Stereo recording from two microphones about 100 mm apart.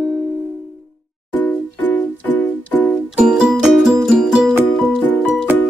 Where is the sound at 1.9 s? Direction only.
20° left (ahead or behind).